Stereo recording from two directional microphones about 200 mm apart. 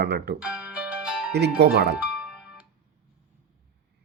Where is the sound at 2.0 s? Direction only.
5° right (ahead or behind).